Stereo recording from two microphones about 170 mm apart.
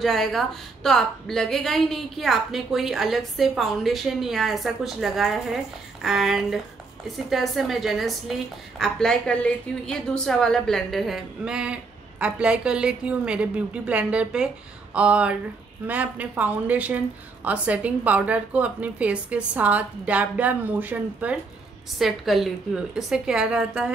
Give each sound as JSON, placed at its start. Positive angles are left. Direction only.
{"t": 0.0, "sound": "a woman's voice", "side_deg": 0}